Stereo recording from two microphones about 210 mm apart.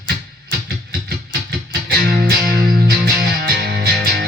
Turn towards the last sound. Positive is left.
turn(degrees=-45)  # may be behind; listen again after turning